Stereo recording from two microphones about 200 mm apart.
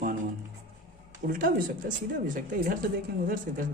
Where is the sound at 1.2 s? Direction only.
40° right (ahead or behind).